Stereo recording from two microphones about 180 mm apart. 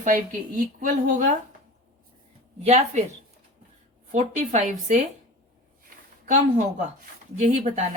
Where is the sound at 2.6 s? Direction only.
40° right (ahead or behind).